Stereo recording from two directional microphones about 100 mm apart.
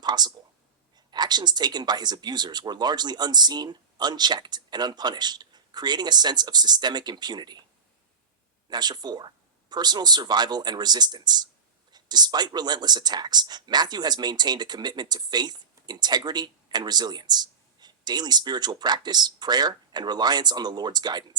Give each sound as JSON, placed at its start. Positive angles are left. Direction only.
{"t": 0.0, "sound": "speech", "side_deg": -45}
{"t": 8.7, "sound": "speech", "side_deg": -45}